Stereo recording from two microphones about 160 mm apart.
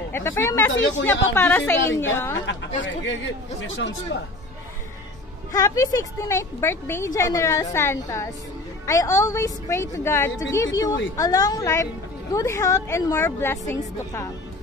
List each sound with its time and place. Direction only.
0.1 s a woman's voice: 15° left (ahead or behind)
3.5 s speech: 90° left
5.5 s a woman's voice: 20° left (ahead or behind)